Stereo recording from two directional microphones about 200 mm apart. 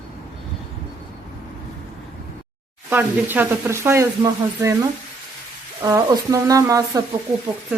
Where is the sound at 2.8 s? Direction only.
10° right (ahead or behind).